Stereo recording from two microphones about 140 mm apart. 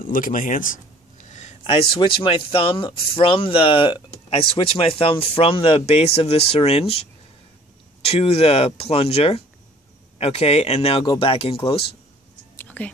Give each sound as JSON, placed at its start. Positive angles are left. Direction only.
{"t": 0.0, "sound": "speech", "side_deg": 80}
{"t": 1.2, "sound": "a sound", "side_deg": 55}
{"t": 1.6, "sound": "speech", "side_deg": 40}
{"t": 12.5, "sound": "music", "side_deg": 10}